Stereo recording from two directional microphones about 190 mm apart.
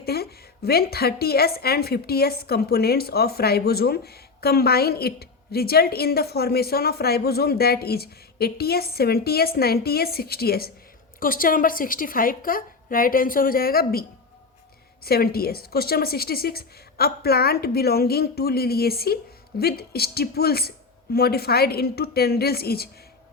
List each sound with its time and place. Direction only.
0.0 s a woman's voice: 55° left (ahead or behind)
15.0 s a woman's voice: 55° left (ahead or behind)